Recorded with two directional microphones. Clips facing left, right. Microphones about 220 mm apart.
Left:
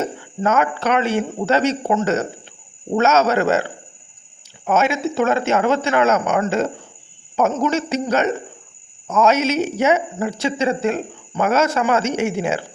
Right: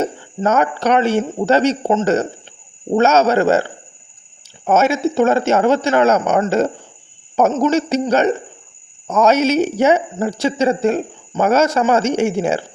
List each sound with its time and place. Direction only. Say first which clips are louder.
0.0 s a man's voice: right 3 dB; 30° right (ahead or behind)